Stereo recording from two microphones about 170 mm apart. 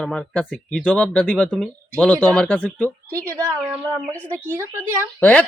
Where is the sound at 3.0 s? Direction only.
20° right (ahead or behind).